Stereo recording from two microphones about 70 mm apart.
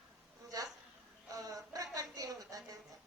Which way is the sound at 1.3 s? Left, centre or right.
Right.